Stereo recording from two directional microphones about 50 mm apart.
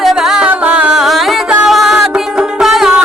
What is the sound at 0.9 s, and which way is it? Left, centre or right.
Music, centre.